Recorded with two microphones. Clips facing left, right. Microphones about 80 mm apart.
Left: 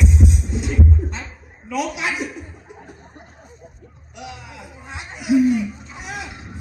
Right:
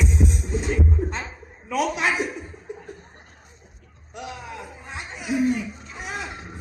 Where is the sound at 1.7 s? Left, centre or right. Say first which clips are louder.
Right 1 dB; right.